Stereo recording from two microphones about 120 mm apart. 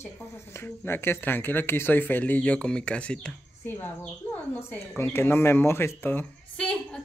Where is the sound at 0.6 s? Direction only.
20° left (ahead or behind).